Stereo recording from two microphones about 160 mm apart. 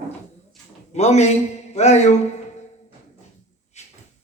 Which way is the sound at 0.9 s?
45° left (ahead or behind).